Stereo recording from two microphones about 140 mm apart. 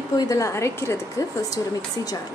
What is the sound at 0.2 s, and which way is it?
A woman's voice, 25° left (ahead or behind).